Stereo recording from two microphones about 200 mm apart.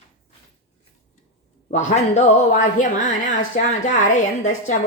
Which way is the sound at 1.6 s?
35° left (ahead or behind).